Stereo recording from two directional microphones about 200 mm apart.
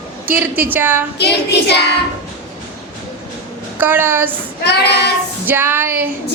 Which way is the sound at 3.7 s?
10° right (ahead or behind).